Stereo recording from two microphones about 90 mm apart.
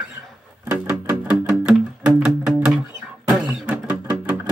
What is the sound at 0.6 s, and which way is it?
Music, 20° right (ahead or behind).